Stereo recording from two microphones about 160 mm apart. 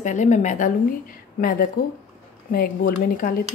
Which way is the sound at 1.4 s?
60° left (ahead or behind).